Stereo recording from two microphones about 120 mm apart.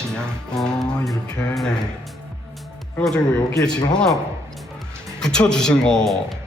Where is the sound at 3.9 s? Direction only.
5° left (ahead or behind).